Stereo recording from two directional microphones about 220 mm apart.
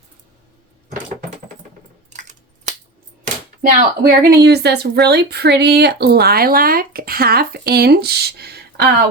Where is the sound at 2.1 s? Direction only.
35° right (ahead or behind).